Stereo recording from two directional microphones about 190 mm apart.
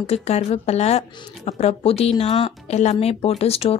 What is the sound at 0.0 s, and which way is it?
Speech, 35° left (ahead or behind).